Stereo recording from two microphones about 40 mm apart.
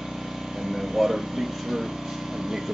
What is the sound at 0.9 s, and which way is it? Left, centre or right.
Speech, centre.